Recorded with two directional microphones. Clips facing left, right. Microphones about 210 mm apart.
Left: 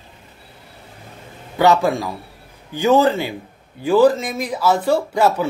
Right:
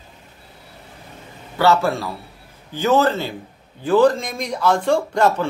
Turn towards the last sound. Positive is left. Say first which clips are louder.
# left 1 dB
turn(degrees=5)  # may be behind; listen again after turning